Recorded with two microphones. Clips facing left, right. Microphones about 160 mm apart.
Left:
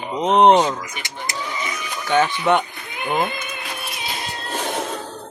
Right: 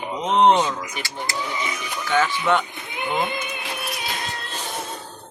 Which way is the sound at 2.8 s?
20° right (ahead or behind).